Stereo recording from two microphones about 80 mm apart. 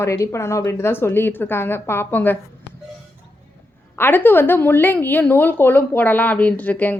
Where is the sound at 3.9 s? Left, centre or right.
Left.